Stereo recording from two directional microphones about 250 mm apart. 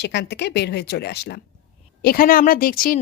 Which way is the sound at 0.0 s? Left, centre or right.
Left.